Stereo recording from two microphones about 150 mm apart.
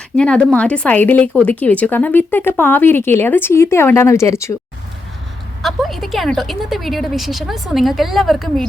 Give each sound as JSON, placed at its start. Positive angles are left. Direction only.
{"t": 0.2, "sound": "speech", "side_deg": 5}
{"t": 5.6, "sound": "speech", "side_deg": 0}